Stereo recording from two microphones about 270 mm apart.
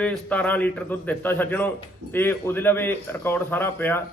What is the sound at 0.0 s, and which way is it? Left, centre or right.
A man's voice, centre.